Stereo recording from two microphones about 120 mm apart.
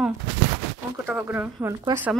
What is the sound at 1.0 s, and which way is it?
Speech, 15° right (ahead or behind).